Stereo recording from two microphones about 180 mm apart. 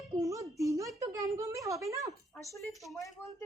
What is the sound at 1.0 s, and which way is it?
Speech, 20° right (ahead or behind).